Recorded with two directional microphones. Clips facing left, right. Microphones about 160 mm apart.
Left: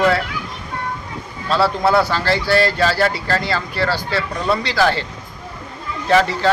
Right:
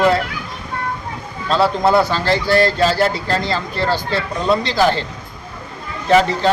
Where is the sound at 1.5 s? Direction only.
20° right (ahead or behind).